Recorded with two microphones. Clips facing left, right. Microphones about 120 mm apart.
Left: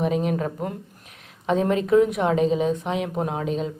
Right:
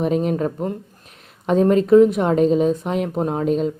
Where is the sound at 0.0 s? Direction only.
40° right (ahead or behind).